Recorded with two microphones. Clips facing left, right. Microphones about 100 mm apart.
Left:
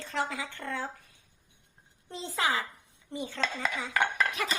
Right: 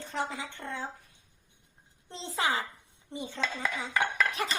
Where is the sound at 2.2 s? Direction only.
25° right (ahead or behind).